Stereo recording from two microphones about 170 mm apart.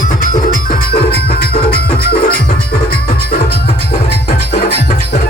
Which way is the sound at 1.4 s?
70° left (ahead or behind).